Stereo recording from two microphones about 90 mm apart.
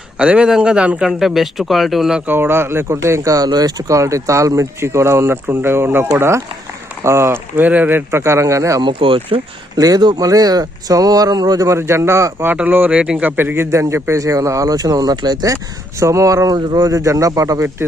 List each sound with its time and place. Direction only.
0.2 s speech: 10° right (ahead or behind)
2.2 s speech: 25° right (ahead or behind)
8.8 s speech: 70° right (ahead or behind)
9.7 s speech: 45° right (ahead or behind)
12.5 s speech: 20° right (ahead or behind)
13.3 s speech: 25° right (ahead or behind); by 15.5 s 50° right (ahead or behind)
16.0 s speech: 35° right (ahead or behind)